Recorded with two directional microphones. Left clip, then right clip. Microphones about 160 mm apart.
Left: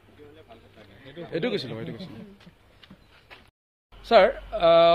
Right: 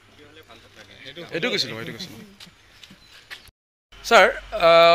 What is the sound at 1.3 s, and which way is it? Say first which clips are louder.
Speech: right 4 dB; 15° left (ahead or behind).